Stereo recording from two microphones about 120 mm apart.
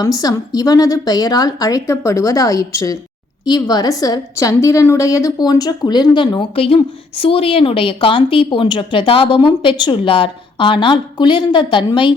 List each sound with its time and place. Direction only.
0.0 s a woman's voice: 30° left (ahead or behind)